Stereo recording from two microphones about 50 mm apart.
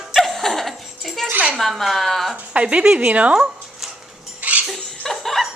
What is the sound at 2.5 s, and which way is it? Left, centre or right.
Speech, right.